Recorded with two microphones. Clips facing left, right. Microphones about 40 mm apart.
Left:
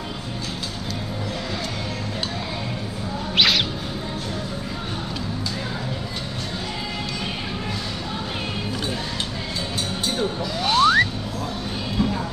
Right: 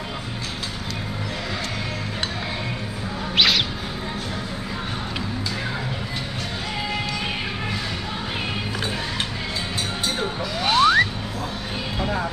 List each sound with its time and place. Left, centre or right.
3.3 s music: centre
10.1 s music: centre
11.9 s a sound: right